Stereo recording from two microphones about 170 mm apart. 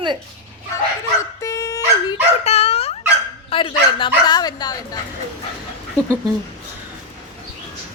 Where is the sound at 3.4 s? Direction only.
30° left (ahead or behind).